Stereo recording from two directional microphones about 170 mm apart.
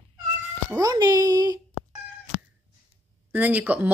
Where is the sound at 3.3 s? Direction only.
10° right (ahead or behind).